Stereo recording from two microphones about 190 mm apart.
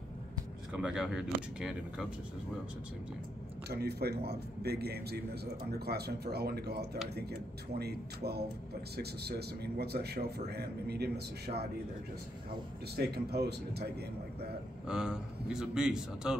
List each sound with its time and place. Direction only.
0.7 s a man's voice: 5° right (ahead or behind)
3.6 s a man's voice: 55° right (ahead or behind)
12.9 s a man's voice: 55° right (ahead or behind)
14.9 s a man's voice: 5° right (ahead or behind)